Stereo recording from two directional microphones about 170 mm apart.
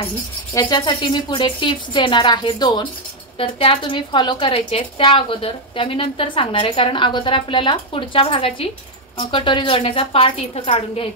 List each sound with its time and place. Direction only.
0.6 s a woman's voice: 25° left (ahead or behind)